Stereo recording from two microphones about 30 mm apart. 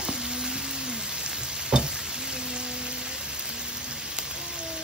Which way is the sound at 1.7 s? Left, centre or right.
Right.